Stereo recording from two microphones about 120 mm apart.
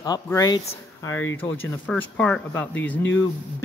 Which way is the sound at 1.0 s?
20° left (ahead or behind).